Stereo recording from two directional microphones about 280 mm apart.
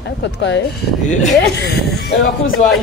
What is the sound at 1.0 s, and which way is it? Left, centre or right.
Speech, left.